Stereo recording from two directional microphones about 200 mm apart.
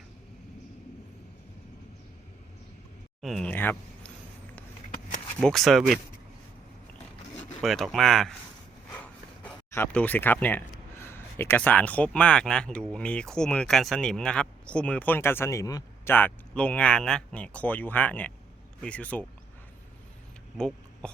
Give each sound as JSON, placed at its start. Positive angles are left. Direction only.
{"t": 3.2, "sound": "speech", "side_deg": 0}
{"t": 5.4, "sound": "speech", "side_deg": 0}
{"t": 7.6, "sound": "speech", "side_deg": 0}
{"t": 9.4, "sound": "speech", "side_deg": 10}
{"t": 20.6, "sound": "speech", "side_deg": 5}